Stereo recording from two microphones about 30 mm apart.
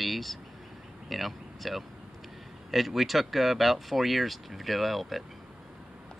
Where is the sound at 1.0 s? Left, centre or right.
Centre.